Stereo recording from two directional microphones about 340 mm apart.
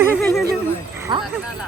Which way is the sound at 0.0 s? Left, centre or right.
Centre.